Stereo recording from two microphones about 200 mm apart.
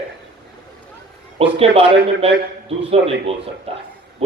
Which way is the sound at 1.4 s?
30° right (ahead or behind).